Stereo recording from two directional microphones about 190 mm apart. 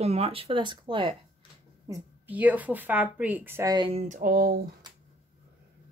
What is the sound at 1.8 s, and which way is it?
A woman's voice, 10° right (ahead or behind).